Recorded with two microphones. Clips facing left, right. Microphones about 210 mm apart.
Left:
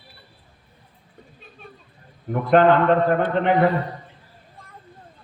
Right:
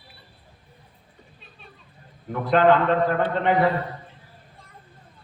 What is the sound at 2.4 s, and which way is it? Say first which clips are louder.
Speech: left 2 dB; 50° left (ahead or behind).